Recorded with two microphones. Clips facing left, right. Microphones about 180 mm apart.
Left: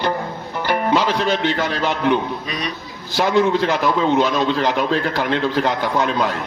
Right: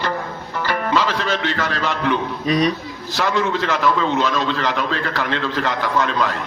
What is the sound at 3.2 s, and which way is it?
Speech, 35° left (ahead or behind).